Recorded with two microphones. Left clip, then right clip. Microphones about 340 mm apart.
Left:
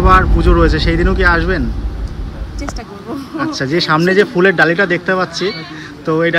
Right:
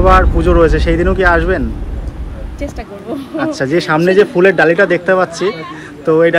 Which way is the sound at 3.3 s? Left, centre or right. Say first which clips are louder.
Right 2 dB; centre.